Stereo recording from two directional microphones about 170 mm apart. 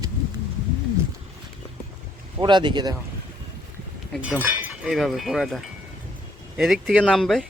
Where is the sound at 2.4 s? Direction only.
25° right (ahead or behind).